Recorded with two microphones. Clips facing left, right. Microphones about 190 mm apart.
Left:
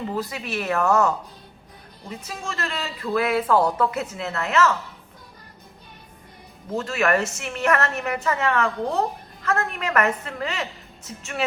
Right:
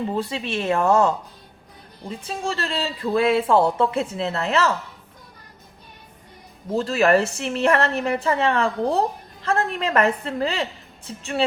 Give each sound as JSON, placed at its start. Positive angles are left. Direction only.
{"t": 0.1, "sound": "a woman's voice", "side_deg": -25}
{"t": 6.7, "sound": "a woman's voice", "side_deg": -30}